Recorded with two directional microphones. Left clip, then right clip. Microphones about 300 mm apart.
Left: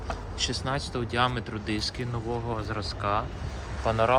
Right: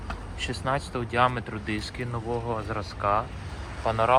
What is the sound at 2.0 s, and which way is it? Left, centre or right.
Speech, centre.